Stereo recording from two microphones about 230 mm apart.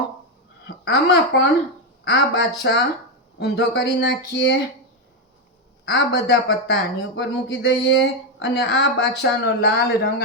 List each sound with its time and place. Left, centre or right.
0.9 s speech: left
5.9 s speech: left